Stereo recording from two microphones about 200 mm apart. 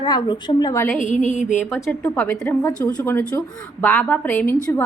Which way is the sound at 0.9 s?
40° left (ahead or behind).